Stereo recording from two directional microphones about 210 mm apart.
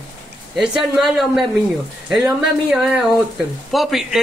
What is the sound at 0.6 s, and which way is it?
Speech, centre (ahead or behind).